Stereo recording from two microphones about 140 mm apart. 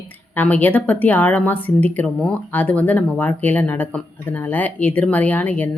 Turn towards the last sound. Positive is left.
turn(degrees=10)  # may be behind; listen again after turning